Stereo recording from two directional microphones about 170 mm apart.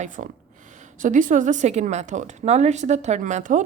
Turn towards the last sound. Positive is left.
turn(degrees=-45)  # may be behind; listen again after turning